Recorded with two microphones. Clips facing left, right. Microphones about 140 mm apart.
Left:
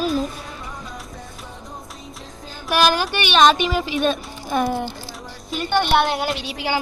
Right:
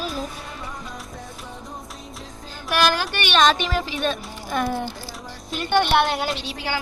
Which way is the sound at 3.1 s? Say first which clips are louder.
Left 3 dB; 5° left (ahead or behind).